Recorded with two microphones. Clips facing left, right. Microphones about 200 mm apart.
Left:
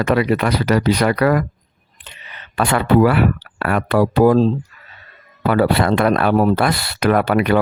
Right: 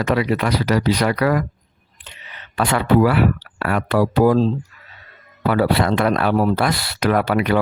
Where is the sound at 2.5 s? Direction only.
55° left (ahead or behind).